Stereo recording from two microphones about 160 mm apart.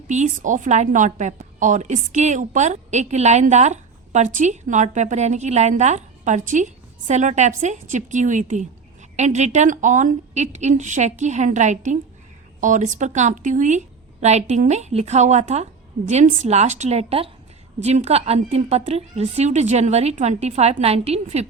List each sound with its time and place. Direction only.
0.1 s a woman's voice: 50° right (ahead or behind)